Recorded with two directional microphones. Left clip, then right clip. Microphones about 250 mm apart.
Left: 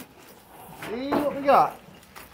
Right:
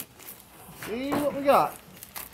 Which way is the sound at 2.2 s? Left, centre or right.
Right.